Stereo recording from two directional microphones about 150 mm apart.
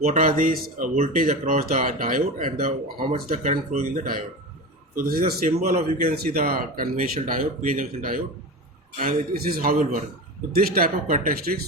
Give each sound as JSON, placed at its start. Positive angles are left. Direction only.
{"t": 0.0, "sound": "speech", "side_deg": -60}
{"t": 9.3, "sound": "speech", "side_deg": -80}